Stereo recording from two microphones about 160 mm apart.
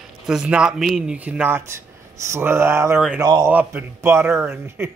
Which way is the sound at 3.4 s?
15° right (ahead or behind).